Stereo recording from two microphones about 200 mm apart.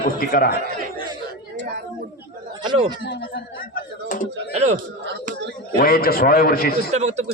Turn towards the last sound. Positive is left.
turn(degrees=-35)  # may be behind; listen again after turning